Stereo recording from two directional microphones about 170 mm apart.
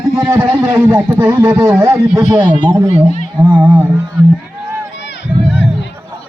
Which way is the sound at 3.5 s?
10° right (ahead or behind).